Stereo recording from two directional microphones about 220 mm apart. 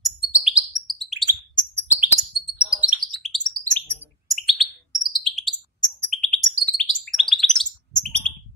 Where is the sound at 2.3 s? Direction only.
Centre (ahead or behind).